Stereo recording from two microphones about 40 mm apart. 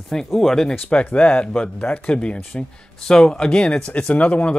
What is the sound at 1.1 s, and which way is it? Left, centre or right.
Speech, left.